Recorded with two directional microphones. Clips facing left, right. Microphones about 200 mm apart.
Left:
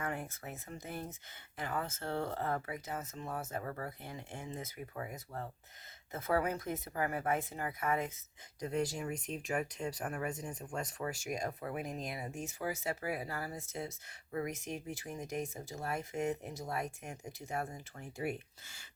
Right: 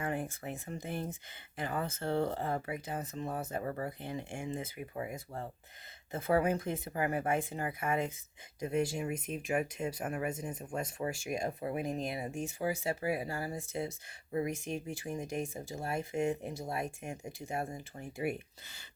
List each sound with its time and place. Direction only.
0.0 s speech: 25° right (ahead or behind)
18.0 s speech: 10° right (ahead or behind)